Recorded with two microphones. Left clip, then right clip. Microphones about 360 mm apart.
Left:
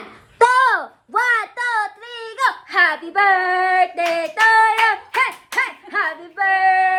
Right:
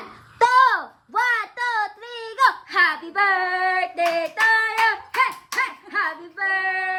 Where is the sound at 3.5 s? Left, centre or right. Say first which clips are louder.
Left 5 dB; left.